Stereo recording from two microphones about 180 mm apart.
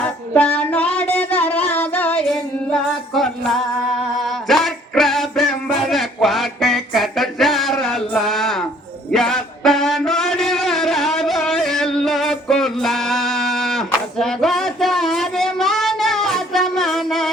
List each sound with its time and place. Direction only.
0.0 s music: 5° left (ahead or behind)
1.1 s a sound: 10° left (ahead or behind)
1.7 s singing: 10° left (ahead or behind)
4.2 s music: centre (ahead or behind)